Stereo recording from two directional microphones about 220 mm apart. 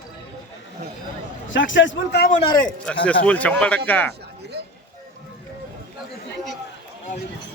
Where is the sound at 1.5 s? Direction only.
60° left (ahead or behind).